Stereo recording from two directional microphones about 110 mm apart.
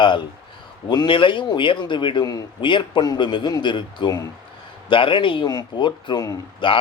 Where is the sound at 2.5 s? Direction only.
50° left (ahead or behind).